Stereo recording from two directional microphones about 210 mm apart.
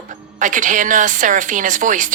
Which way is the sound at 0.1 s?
40° right (ahead or behind).